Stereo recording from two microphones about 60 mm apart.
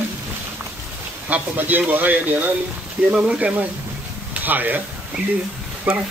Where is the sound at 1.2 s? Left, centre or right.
Right.